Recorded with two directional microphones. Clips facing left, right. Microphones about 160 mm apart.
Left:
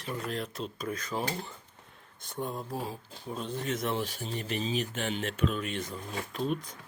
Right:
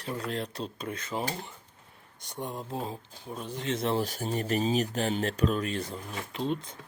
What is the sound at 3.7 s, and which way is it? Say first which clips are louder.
Speech: right 5 dB; 30° right (ahead or behind).